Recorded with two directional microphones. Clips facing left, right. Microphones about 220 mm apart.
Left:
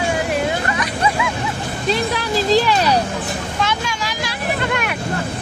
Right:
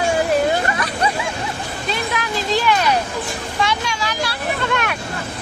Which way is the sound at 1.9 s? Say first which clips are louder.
Left 5 dB; 35° left (ahead or behind).